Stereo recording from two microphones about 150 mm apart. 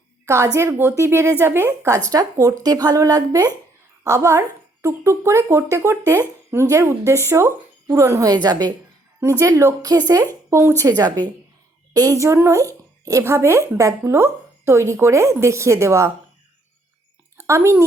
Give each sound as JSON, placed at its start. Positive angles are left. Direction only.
{"t": 0.3, "sound": "a woman's voice", "side_deg": -20}
{"t": 17.3, "sound": "a woman's voice", "side_deg": -20}